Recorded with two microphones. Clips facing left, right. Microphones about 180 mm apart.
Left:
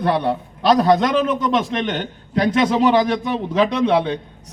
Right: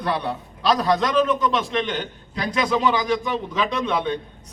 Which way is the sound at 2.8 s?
70° left (ahead or behind).